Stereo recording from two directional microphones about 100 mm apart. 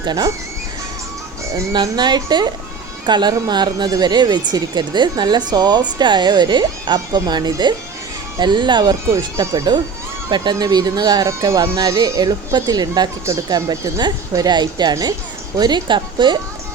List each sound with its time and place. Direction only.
0.0 s speech: 45° right (ahead or behind)
1.7 s speech: 45° right (ahead or behind)
9.0 s speech: 35° right (ahead or behind); by 16.4 s 50° right (ahead or behind)